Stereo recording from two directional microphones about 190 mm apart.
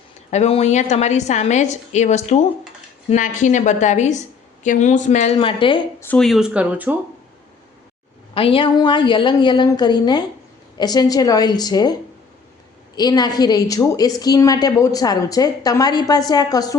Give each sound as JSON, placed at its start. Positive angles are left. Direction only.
{"t": 0.3, "sound": "a woman's voice", "side_deg": 35}
{"t": 6.0, "sound": "speech", "side_deg": 5}
{"t": 8.4, "sound": "a woman's voice", "side_deg": 30}
{"t": 13.0, "sound": "a woman's voice", "side_deg": 20}